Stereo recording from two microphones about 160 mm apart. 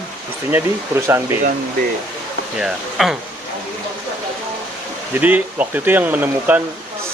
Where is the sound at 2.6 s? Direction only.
5° right (ahead or behind).